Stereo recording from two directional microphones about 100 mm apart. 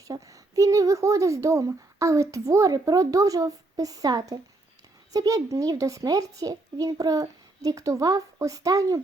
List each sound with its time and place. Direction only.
0.0 s speech: 35° right (ahead or behind)